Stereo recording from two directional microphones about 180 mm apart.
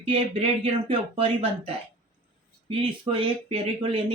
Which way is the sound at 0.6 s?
30° right (ahead or behind).